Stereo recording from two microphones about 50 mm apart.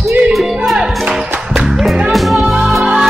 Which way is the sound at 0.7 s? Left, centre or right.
Centre.